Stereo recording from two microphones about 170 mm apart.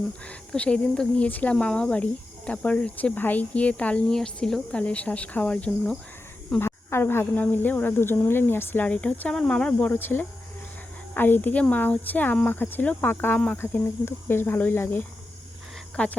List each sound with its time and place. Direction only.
0.3 s speech: 5° left (ahead or behind)